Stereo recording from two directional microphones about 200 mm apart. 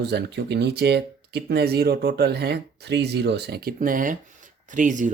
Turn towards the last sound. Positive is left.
turn(degrees=-40)  # may be behind; listen again after turning